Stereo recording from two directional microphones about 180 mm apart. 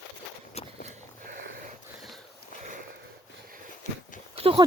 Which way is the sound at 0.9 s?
45° right (ahead or behind).